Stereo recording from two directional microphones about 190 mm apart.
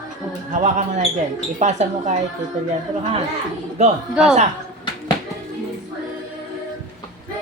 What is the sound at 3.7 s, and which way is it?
Speech, 35° right (ahead or behind).